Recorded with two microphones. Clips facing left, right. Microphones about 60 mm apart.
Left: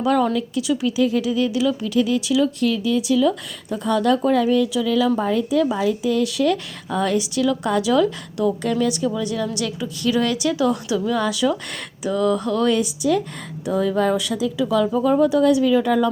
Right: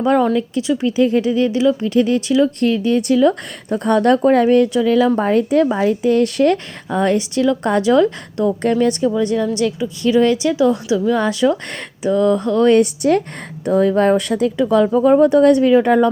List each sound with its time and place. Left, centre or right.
0.0 s speech: right
2.8 s speech: right
4.8 s speech: right
12.7 s speech: right
13.7 s speech: right
15.7 s speech: right